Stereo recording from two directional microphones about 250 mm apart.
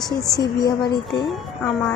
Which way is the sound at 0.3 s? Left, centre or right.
Centre.